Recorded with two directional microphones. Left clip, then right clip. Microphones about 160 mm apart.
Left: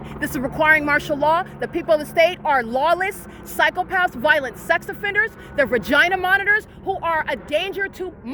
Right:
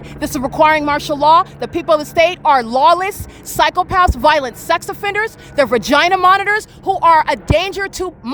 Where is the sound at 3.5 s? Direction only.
30° right (ahead or behind).